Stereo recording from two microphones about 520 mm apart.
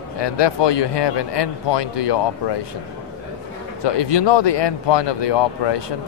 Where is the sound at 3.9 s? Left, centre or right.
Left.